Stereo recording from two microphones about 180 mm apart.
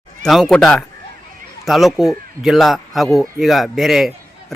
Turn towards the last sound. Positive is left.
turn(degrees=0)  # may be behind; listen again after turning